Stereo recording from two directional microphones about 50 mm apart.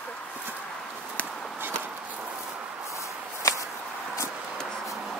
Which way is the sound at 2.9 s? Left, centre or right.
Left.